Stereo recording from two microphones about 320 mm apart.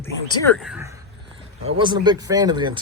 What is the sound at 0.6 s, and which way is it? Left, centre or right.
Speech, centre.